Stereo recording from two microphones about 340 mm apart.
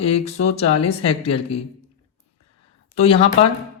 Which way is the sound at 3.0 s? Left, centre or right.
Centre.